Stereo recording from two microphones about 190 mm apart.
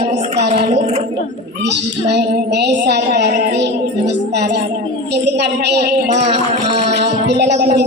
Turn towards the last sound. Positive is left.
turn(degrees=-60)  # may be behind; listen again after turning